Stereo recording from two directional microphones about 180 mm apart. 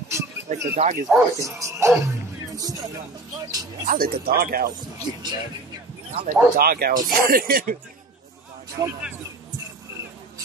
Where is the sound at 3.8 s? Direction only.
55° right (ahead or behind).